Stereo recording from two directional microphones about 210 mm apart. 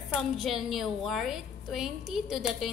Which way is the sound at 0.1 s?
Centre (ahead or behind).